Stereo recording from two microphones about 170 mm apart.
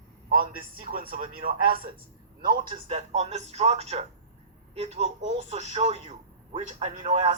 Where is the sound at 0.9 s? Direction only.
55° right (ahead or behind).